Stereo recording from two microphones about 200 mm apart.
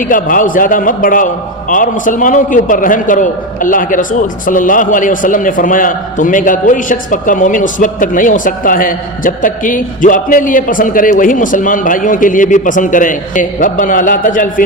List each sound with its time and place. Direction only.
0.0 s a man's voice: 40° left (ahead or behind)